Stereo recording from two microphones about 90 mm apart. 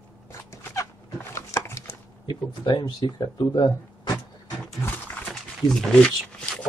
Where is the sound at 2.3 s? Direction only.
55° left (ahead or behind).